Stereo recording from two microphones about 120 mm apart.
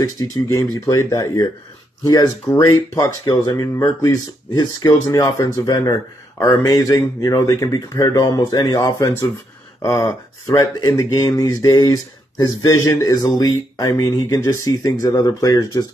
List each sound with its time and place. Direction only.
0.0 s speech: 30° left (ahead or behind)